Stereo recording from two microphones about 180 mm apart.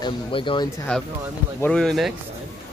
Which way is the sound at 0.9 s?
5° left (ahead or behind).